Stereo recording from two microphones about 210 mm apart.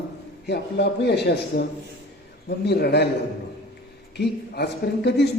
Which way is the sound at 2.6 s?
50° left (ahead or behind).